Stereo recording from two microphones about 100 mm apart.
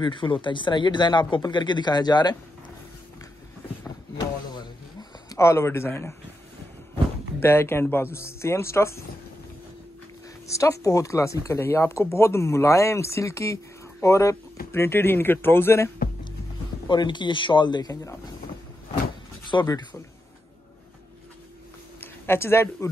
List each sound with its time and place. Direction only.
0.0 s a man's voice: 55° left (ahead or behind)
5.3 s speech: 30° left (ahead or behind)
7.3 s speech: 25° left (ahead or behind)
10.4 s speech: 30° left (ahead or behind)
16.8 s a man's voice: 50° left (ahead or behind)
19.5 s speech: 40° left (ahead or behind)
22.0 s speech: 25° left (ahead or behind)